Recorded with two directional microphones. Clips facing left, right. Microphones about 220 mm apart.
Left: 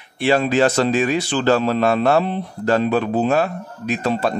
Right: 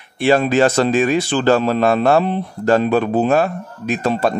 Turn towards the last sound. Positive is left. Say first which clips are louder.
# right 2 dB
turn(degrees=-50)  # may be behind; listen again after turning